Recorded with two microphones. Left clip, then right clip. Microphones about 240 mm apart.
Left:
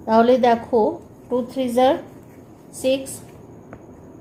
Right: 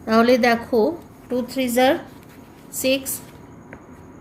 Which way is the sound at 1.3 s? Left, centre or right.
Right.